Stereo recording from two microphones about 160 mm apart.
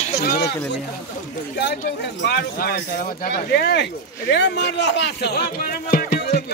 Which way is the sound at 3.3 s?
85° left.